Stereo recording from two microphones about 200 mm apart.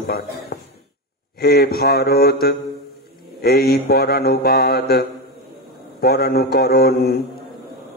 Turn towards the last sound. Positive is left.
turn(degrees=50)  # may be behind; listen again after turning